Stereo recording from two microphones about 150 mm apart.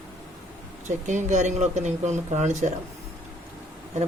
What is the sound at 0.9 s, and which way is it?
Speech, 55° right (ahead or behind).